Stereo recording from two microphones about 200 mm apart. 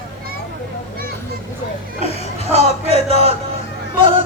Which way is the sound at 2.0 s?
30° right (ahead or behind).